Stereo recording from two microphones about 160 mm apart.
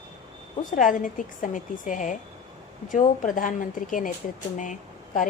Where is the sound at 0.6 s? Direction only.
55° left (ahead or behind).